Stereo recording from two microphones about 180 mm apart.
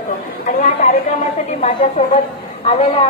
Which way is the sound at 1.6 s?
35° left (ahead or behind).